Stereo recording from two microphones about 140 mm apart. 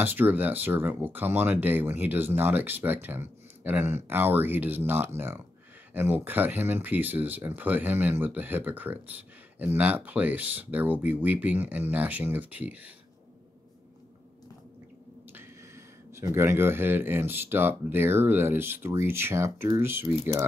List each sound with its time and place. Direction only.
0.0 s speech: 15° right (ahead or behind)
15.3 s speech: 20° right (ahead or behind)